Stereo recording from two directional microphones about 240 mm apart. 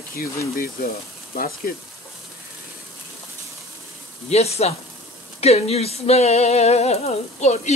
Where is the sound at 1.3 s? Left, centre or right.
Left.